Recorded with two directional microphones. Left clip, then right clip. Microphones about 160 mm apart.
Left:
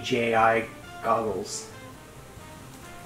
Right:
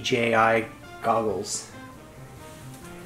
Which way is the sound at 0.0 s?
35° right (ahead or behind).